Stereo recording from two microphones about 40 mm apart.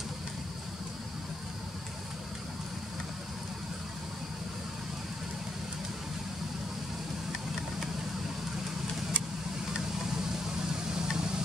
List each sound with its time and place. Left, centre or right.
10.9 s vehicle: centre